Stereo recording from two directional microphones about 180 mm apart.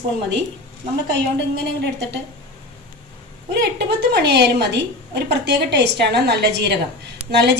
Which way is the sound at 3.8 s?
65° right (ahead or behind).